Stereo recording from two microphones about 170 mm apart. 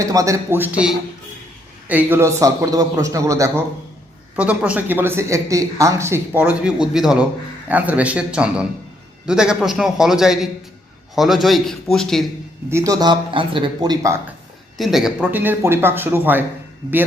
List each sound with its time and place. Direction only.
0.0 s a man's voice: 20° right (ahead or behind)
4.4 s a man's voice: 5° right (ahead or behind)
12.7 s a man's voice: 20° right (ahead or behind)
14.8 s speech: centre (ahead or behind)